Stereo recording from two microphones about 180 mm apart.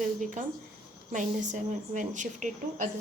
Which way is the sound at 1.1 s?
45° right (ahead or behind).